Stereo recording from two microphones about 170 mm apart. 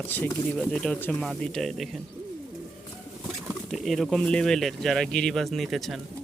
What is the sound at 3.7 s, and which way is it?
Speech, centre (ahead or behind).